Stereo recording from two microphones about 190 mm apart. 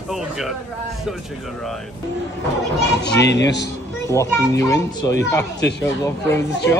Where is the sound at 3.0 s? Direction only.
65° left (ahead or behind).